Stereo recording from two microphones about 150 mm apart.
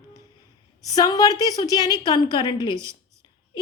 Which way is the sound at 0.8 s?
25° left (ahead or behind).